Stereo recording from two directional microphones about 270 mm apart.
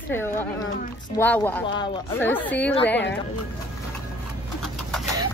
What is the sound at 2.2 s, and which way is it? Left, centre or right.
Speech, centre.